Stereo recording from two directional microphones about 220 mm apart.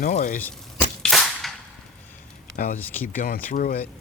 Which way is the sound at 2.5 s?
35° left (ahead or behind).